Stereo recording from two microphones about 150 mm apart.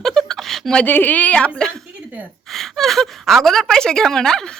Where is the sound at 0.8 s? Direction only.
10° left (ahead or behind).